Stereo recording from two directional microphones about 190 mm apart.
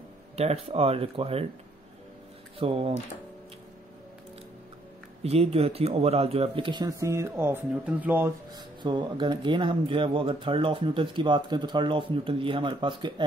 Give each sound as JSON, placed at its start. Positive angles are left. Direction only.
{"t": 0.4, "sound": "speech", "side_deg": -30}
{"t": 2.6, "sound": "speech", "side_deg": -30}
{"t": 5.2, "sound": "speech", "side_deg": -30}
{"t": 8.5, "sound": "speech", "side_deg": -25}